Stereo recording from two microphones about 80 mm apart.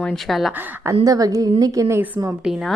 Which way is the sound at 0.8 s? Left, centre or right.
Right.